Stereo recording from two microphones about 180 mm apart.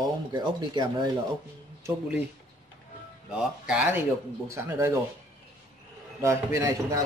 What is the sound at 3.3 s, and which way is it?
Speech, 5° right (ahead or behind).